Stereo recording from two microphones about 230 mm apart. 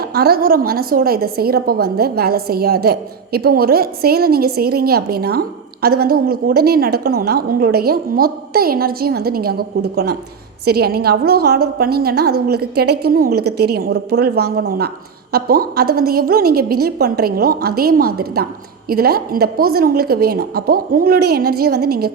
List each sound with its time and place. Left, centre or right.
0.0 s a woman's voice: right